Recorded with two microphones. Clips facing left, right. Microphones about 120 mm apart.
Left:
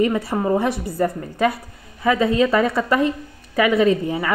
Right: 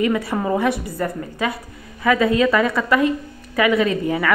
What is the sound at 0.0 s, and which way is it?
A woman's voice, 35° left (ahead or behind).